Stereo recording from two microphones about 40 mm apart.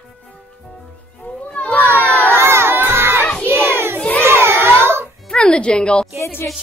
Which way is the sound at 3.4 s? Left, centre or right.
Right.